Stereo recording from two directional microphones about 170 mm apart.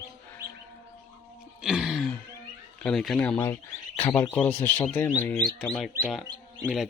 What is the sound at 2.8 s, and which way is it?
Speech, 5° left (ahead or behind).